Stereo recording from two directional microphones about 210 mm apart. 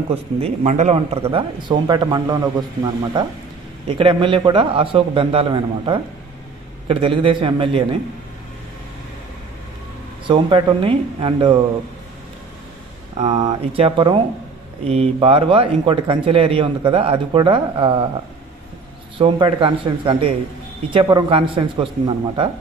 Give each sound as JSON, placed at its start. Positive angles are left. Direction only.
{"t": 0.1, "sound": "speech", "side_deg": -30}
{"t": 3.8, "sound": "speech", "side_deg": -25}
{"t": 10.2, "sound": "speech", "side_deg": -25}
{"t": 13.2, "sound": "speech", "side_deg": -30}
{"t": 19.1, "sound": "speech", "side_deg": -25}